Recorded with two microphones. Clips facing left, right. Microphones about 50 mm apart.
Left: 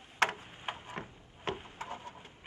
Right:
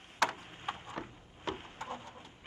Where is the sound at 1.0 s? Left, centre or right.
Left.